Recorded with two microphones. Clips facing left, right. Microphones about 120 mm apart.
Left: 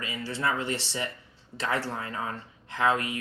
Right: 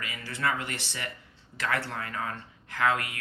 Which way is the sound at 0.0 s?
25° left (ahead or behind).